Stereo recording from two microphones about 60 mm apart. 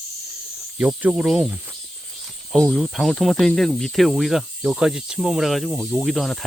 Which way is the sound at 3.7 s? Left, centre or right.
Centre.